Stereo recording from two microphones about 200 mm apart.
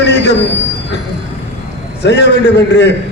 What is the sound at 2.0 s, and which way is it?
Speech, 60° left (ahead or behind).